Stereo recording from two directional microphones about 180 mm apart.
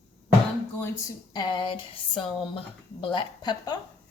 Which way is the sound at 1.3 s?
25° left (ahead or behind).